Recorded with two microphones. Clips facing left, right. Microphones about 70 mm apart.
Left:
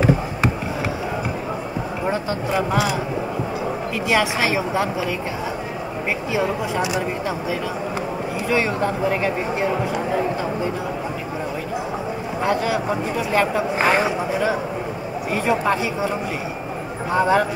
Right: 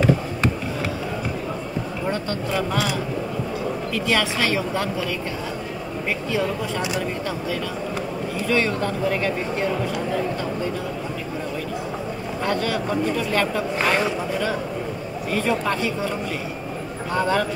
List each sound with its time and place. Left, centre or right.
2.0 s a man's voice: centre
4.1 s a man's voice: centre
6.3 s a man's voice: centre
8.5 s a man's voice: centre
12.4 s a man's voice: centre
17.1 s a man's voice: centre